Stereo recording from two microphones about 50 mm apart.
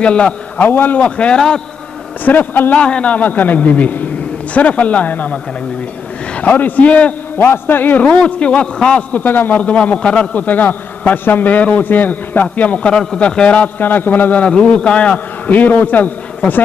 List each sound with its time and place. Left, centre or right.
0.0 s a man's voice: left
0.7 s a man's voice: left
1.0 s a man's voice: left
2.2 s a man's voice: left
2.7 s a man's voice: left
6.3 s a man's voice: left
7.3 s a man's voice: left
9.1 s a man's voice: left
9.6 s a man's voice: left
10.3 s a man's voice: left
12.9 s a man's voice: centre
13.2 s a man's voice: left
13.7 s a man's voice: left
14.4 s a man's voice: left